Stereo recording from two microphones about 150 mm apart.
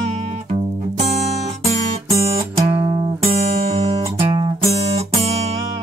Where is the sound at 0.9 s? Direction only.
45° right (ahead or behind).